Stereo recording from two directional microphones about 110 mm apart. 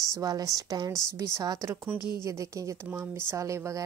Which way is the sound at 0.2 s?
35° right (ahead or behind).